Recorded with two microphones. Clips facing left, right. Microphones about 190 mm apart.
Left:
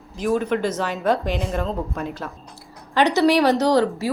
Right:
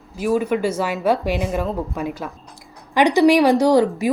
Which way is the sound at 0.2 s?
10° right (ahead or behind).